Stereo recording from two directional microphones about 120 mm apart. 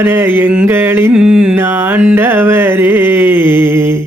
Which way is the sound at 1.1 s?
10° right (ahead or behind).